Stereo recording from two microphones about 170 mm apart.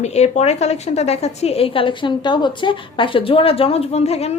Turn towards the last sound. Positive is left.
turn(degrees=40)  # may be behind; listen again after turning